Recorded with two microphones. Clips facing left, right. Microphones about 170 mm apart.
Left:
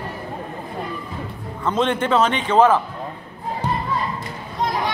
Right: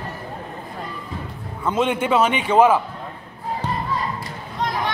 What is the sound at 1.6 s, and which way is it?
A man's voice, 10° right (ahead or behind).